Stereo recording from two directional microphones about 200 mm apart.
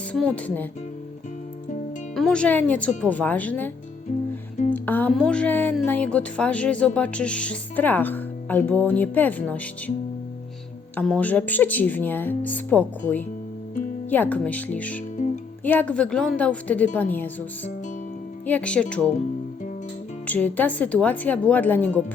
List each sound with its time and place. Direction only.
0.1 s speech: 5° left (ahead or behind)
2.1 s speech: 5° left (ahead or behind)
4.1 s music: 35° left (ahead or behind)
4.7 s speech: 10° left (ahead or behind)
10.9 s speech: 5° left (ahead or behind)
18.4 s speech: 5° left (ahead or behind)
20.2 s speech: 10° left (ahead or behind)